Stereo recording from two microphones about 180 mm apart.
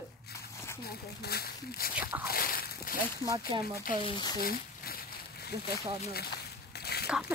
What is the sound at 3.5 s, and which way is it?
Speech, 25° right (ahead or behind).